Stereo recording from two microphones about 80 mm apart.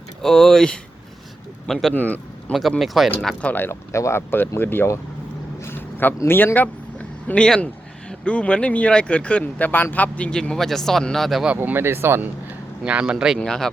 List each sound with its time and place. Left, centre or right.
0.2 s speech: centre
1.9 s speech: left
2.5 s speech: centre
3.4 s speech: left
3.7 s speech: left
5.5 s a sound: left
6.2 s speech: left; by 11.4 s centre
11.5 s speech: right
12.8 s speech: centre
13.4 s speech: centre